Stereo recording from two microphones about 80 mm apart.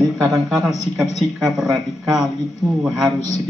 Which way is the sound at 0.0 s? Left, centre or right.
Centre.